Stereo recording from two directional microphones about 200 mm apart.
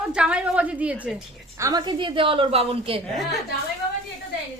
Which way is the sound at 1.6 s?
20° right (ahead or behind).